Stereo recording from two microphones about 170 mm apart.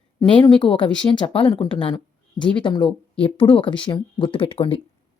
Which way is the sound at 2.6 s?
30° left (ahead or behind).